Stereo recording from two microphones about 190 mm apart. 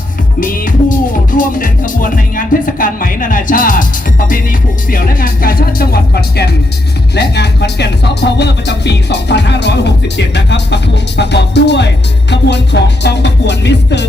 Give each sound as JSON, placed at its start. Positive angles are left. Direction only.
{"t": 0.3, "sound": "music", "side_deg": 45}
{"t": 4.9, "sound": "speech", "side_deg": 50}